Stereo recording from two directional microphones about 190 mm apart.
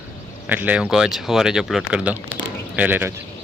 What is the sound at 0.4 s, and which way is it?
Speech, 10° right (ahead or behind).